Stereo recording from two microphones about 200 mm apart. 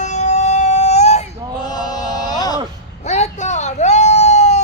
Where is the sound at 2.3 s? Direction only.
20° left (ahead or behind).